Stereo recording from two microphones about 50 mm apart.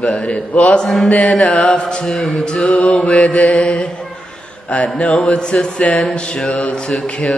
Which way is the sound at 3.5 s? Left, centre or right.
Centre.